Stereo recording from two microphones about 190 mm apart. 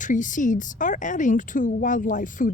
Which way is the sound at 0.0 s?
40° left (ahead or behind).